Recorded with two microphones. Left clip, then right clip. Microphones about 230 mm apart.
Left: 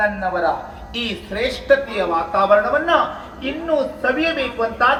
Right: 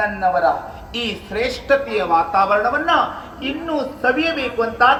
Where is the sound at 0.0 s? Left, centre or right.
Right.